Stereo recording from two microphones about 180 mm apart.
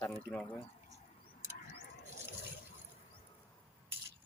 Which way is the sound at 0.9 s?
40° left (ahead or behind).